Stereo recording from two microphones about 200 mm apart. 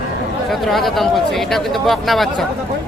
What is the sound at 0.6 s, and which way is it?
Speech, centre (ahead or behind).